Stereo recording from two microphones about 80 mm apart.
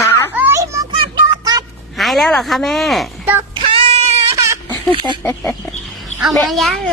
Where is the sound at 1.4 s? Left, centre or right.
Right.